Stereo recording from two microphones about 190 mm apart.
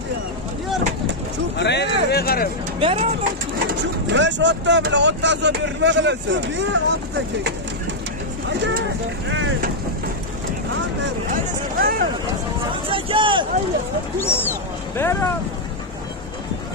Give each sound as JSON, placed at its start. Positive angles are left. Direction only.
{"t": 1.6, "sound": "speech", "side_deg": 65}
{"t": 2.8, "sound": "speech", "side_deg": -30}
{"t": 3.7, "sound": "speech", "side_deg": -70}
{"t": 8.5, "sound": "speech", "side_deg": -65}
{"t": 11.3, "sound": "speech", "side_deg": -50}
{"t": 12.8, "sound": "speech", "side_deg": -25}
{"t": 15.0, "sound": "speech", "side_deg": 10}